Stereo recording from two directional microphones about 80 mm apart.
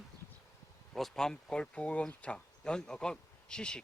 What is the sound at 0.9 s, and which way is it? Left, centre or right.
Speech, centre.